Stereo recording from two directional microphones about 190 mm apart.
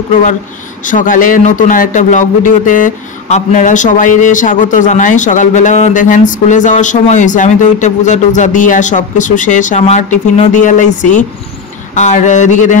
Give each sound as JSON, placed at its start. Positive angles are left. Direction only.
{"t": 0.8, "sound": "speech", "side_deg": 45}